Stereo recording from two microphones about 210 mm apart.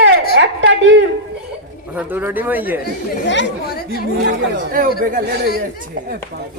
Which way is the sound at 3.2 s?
50° left (ahead or behind).